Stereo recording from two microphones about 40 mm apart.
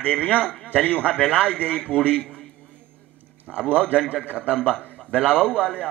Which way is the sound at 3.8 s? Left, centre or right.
Left.